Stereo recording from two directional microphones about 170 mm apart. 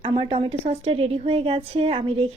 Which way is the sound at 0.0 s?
30° right (ahead or behind).